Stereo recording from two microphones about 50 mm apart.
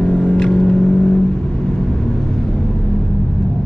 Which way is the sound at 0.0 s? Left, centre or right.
Centre.